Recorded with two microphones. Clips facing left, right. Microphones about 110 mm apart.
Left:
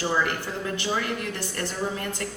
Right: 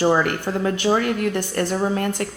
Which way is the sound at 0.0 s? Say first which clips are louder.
Right 7 dB; 60° right (ahead or behind).